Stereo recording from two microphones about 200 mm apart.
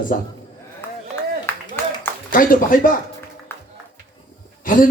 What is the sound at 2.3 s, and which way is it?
Speech, 45° left (ahead or behind).